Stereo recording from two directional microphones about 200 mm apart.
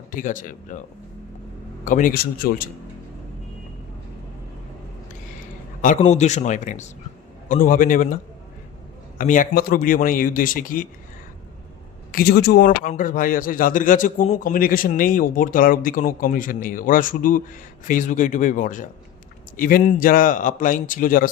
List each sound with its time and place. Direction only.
0.1 s a man's voice: 40° left (ahead or behind)
1.8 s a man's voice: 40° left (ahead or behind)
6.0 s a man's voice: 35° left (ahead or behind)
12.1 s a man's voice: 55° left (ahead or behind)